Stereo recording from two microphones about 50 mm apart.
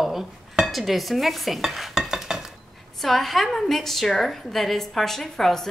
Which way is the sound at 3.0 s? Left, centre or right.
Centre.